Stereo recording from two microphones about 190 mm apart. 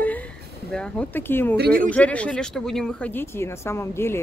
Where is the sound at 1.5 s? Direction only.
55° right (ahead or behind).